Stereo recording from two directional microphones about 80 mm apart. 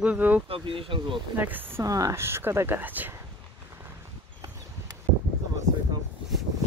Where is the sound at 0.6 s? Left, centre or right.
Right.